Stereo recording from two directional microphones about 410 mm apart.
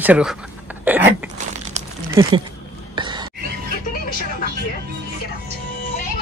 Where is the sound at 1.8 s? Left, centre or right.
Centre.